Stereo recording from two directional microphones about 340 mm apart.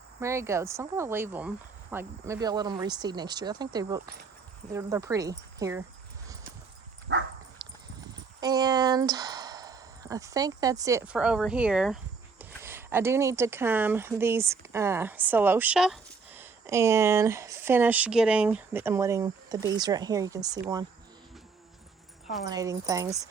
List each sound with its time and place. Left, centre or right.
0.2 s speech: centre
7.1 s dog: right
8.4 s speech: centre
22.4 s speech: centre